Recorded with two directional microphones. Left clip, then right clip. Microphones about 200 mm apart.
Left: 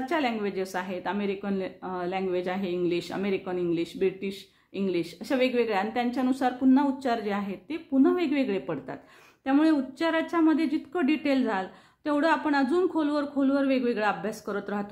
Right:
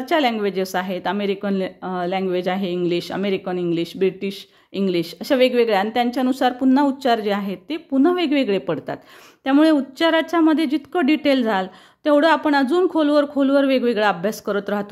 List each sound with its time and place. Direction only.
0.0 s a woman's voice: 40° right (ahead or behind)